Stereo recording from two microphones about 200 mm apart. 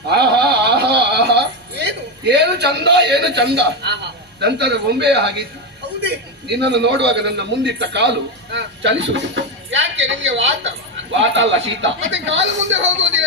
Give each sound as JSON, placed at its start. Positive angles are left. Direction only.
{"t": 0.1, "sound": "music", "side_deg": -55}
{"t": 6.0, "sound": "a man's voice", "side_deg": -55}